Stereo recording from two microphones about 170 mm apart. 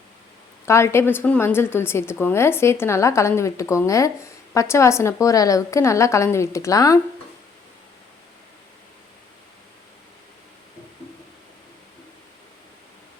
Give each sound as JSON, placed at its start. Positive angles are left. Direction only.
{"t": 0.6, "sound": "a woman's voice", "side_deg": 15}